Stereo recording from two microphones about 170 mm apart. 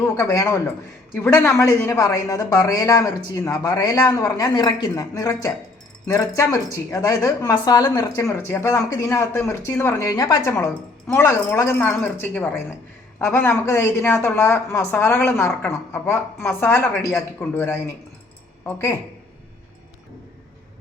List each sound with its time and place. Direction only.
0.0 s a man's voice: 15° left (ahead or behind)